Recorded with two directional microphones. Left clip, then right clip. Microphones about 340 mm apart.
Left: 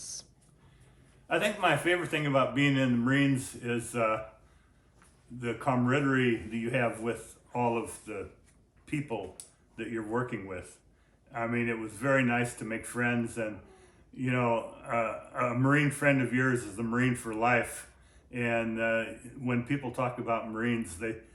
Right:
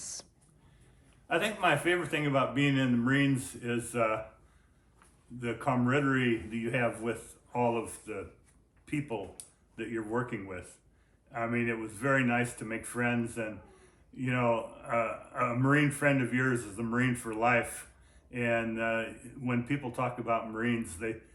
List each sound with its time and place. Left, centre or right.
0.0 s a sound: centre
1.3 s speech: centre
5.4 s speech: centre